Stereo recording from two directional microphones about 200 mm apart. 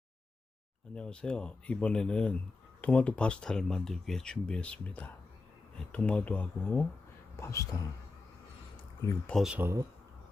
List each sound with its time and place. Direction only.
0.9 s speech: 5° left (ahead or behind)
9.0 s speech: 15° left (ahead or behind)
9.3 s speech: 5° right (ahead or behind)